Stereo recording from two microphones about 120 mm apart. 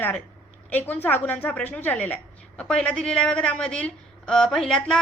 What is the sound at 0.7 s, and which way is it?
A woman's voice, 15° left (ahead or behind).